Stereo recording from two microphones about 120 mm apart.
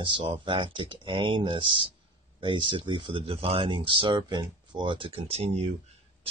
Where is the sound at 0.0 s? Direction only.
45° right (ahead or behind).